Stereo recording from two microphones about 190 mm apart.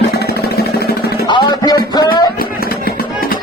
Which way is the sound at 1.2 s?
20° left (ahead or behind).